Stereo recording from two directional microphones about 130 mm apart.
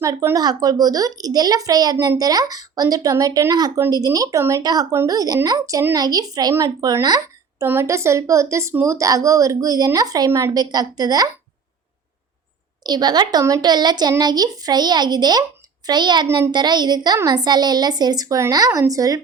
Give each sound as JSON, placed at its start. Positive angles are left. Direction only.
{"t": 0.0, "sound": "speech", "side_deg": -25}
{"t": 12.8, "sound": "a woman's voice", "side_deg": -30}